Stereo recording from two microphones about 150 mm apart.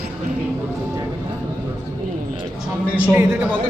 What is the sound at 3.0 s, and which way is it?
Speech, 15° right (ahead or behind).